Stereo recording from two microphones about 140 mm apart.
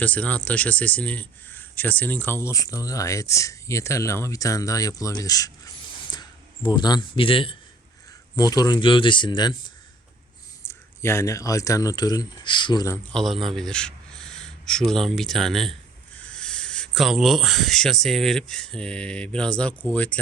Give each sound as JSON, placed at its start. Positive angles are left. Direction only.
{"t": 0.0, "sound": "speech", "side_deg": 10}
{"t": 8.4, "sound": "speech", "side_deg": 25}
{"t": 11.0, "sound": "speech", "side_deg": 20}
{"t": 13.1, "sound": "a man's voice", "side_deg": 0}